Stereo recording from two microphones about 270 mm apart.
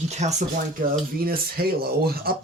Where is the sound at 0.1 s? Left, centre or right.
Right.